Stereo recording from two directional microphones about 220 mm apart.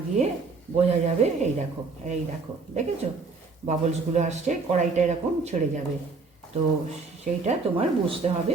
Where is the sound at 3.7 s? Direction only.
30° right (ahead or behind).